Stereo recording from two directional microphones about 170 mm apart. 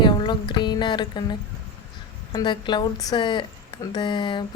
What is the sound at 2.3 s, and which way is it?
A woman's voice, 25° left (ahead or behind).